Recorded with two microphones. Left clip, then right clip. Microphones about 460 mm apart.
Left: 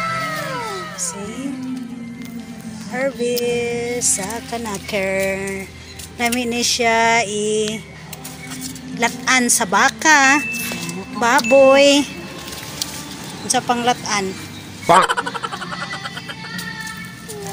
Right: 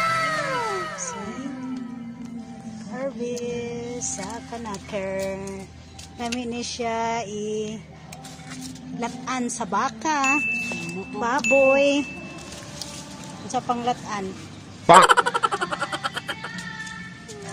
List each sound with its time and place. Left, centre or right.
0.0 s music: centre
2.9 s music: right
3.4 s speech: right
6.1 s a sound: right
9.0 s speech: right
13.5 s a sound: right
14.9 s vehicle: centre